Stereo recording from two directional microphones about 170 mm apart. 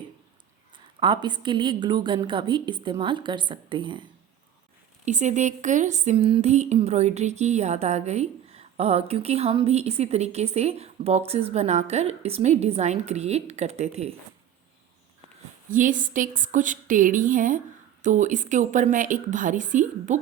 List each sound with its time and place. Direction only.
0.9 s a woman's voice: 30° right (ahead or behind)
5.0 s speech: 45° right (ahead or behind)
15.7 s a woman's voice: 50° right (ahead or behind)